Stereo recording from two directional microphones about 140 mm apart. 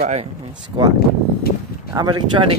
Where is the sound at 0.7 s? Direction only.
35° right (ahead or behind).